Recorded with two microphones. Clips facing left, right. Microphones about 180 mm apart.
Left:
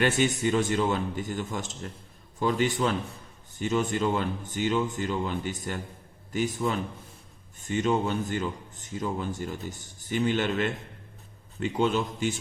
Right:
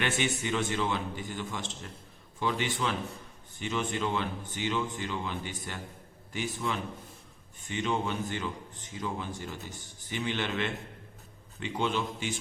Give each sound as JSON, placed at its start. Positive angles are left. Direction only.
{"t": 0.0, "sound": "a man's voice", "side_deg": 40}